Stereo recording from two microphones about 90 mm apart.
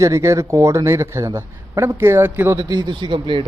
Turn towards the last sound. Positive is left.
turn(degrees=-65)  # may be behind; listen again after turning